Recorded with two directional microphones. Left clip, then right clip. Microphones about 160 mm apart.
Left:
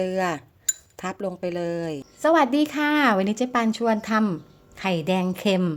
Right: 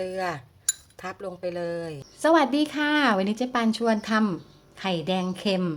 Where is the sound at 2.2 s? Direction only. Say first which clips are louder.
Left 1 dB; 15° left (ahead or behind).